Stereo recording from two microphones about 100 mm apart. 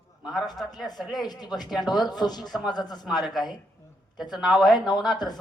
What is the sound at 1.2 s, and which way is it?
Speech, 45° left (ahead or behind).